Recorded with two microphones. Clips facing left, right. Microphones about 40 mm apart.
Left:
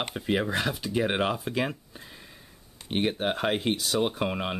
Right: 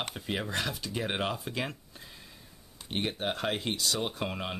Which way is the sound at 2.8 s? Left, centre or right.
Centre.